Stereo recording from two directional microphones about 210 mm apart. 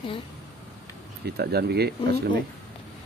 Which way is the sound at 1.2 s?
50° right (ahead or behind).